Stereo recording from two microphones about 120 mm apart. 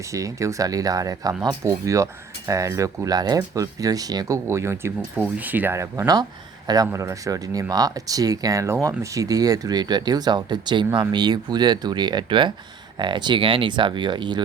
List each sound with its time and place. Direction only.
0.1 s speech: 25° right (ahead or behind)
4.4 s speech: 20° right (ahead or behind); by 14.4 s 40° right (ahead or behind)